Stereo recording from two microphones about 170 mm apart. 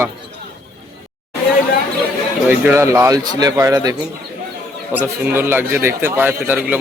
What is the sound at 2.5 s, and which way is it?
A man's voice, 15° right (ahead or behind).